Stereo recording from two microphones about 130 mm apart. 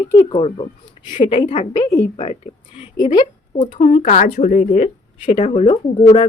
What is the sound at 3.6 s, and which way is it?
Speech, 70° left (ahead or behind).